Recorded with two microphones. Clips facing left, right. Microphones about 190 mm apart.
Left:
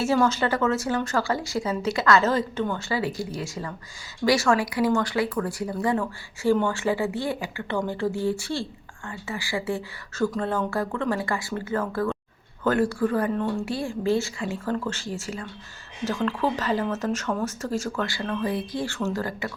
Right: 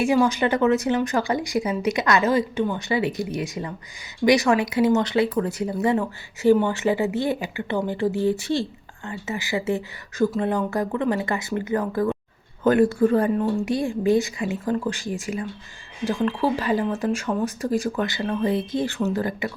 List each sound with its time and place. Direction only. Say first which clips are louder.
0.0 s speech: right 3 dB; 15° right (ahead or behind)
13.3 s speech: right 4 dB; 5° right (ahead or behind)
13.7 s speech: right 4 dB; 20° right (ahead or behind)